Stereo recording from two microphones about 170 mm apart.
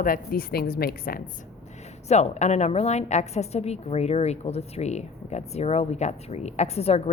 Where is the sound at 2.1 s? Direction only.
40° left (ahead or behind).